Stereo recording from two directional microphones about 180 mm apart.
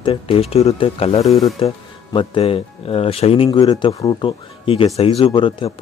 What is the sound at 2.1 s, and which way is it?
Speech, 30° left (ahead or behind).